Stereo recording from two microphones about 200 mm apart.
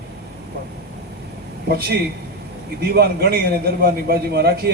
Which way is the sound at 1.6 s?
50° right (ahead or behind).